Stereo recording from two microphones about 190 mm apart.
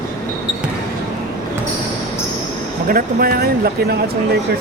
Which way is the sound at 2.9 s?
50° right (ahead or behind).